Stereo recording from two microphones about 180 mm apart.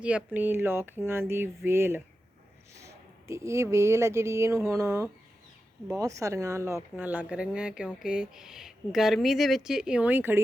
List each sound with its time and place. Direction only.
0.0 s speech: 5° right (ahead or behind)
3.2 s speech: 15° right (ahead or behind)